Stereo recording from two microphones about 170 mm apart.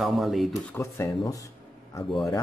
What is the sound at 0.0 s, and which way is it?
Speech, centre (ahead or behind).